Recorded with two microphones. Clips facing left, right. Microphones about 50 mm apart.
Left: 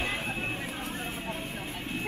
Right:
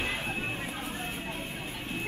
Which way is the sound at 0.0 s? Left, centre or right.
Centre.